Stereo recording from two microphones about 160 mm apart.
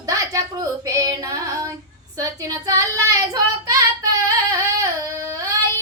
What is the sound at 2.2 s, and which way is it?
Child singing, 20° right (ahead or behind).